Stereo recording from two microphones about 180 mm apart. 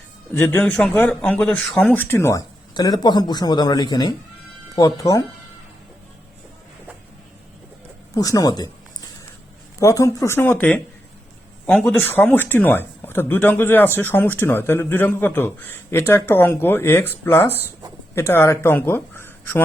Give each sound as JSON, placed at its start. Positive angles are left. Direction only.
{"t": 0.3, "sound": "speech", "side_deg": 10}
{"t": 8.1, "sound": "speech", "side_deg": 20}
{"t": 9.8, "sound": "speech", "side_deg": 15}